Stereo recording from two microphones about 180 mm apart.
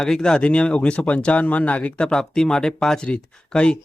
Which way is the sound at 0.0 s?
5° left (ahead or behind).